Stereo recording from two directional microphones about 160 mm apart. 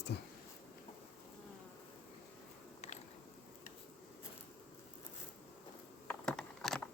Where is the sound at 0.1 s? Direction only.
90° left.